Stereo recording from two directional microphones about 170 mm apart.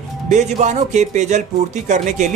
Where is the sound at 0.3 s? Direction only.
45° right (ahead or behind).